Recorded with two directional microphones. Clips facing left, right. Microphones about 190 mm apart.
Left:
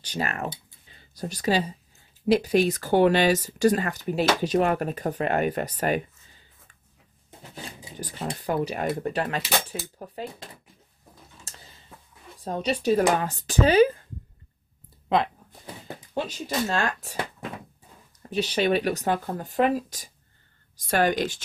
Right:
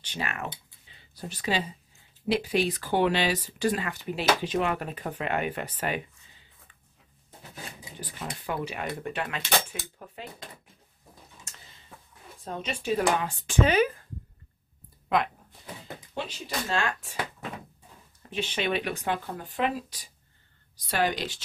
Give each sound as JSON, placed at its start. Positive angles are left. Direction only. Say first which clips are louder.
{"t": 0.0, "sound": "speech", "louder": "left 5 dB", "side_deg": 40}
{"t": 8.0, "sound": "speech", "louder": "left 6 dB", "side_deg": 35}
{"t": 11.5, "sound": "a sound", "louder": "left 3 dB", "side_deg": 35}
{"t": 12.4, "sound": "speech", "louder": "left 6 dB", "side_deg": 40}
{"t": 15.0, "sound": "a sound", "louder": "left 3 dB", "side_deg": 30}
{"t": 16.6, "sound": "speech", "louder": "right 1 dB", "side_deg": 40}
{"t": 18.3, "sound": "speech", "louder": "left 6 dB", "side_deg": 40}